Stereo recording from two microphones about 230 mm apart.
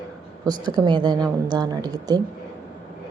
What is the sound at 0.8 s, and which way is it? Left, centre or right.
A woman's voice, centre.